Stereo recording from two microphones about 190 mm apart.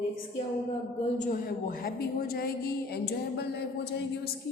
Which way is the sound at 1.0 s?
45° left (ahead or behind).